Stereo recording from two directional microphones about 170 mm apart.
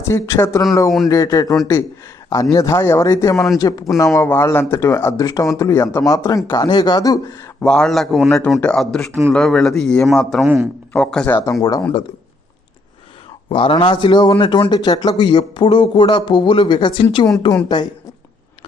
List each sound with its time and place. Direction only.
0.0 s a man's voice: 15° left (ahead or behind)
7.6 s a man's voice: 5° left (ahead or behind)
10.4 s a man's voice: 10° right (ahead or behind)
10.9 s a man's voice: 5° left (ahead or behind)
11.6 s a man's voice: 25° left (ahead or behind)
13.5 s a man's voice: 30° left (ahead or behind)